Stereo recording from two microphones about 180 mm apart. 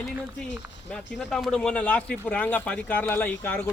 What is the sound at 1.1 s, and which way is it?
Speech, 5° left (ahead or behind).